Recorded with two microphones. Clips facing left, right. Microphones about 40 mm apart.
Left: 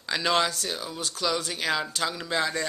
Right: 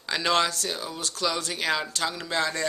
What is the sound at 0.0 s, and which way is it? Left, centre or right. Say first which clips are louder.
Speech: right 1 dB; centre.